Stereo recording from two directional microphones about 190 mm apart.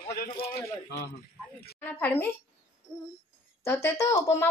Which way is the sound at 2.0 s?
10° left (ahead or behind).